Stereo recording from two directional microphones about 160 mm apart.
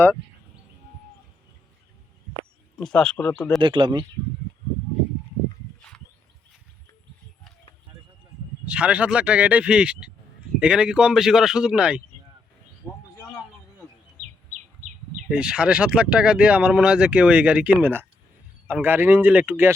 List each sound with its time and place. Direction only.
2.7 s speech: 5° left (ahead or behind)
3.6 s speech: 30° right (ahead or behind)
8.6 s speech: 5° right (ahead or behind)
12.8 s a sound: 5° left (ahead or behind)
15.3 s speech: 5° right (ahead or behind)